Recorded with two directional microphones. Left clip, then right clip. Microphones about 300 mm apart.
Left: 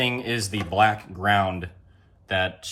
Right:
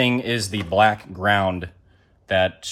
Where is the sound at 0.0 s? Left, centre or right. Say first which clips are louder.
Right 4 dB; right.